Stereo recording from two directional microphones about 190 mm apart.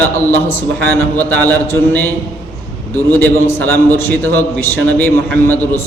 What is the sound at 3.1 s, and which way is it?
A man's voice, 10° left (ahead or behind).